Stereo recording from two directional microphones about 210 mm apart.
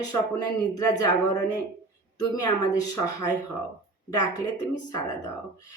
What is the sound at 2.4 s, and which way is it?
A woman's voice, 20° left (ahead or behind).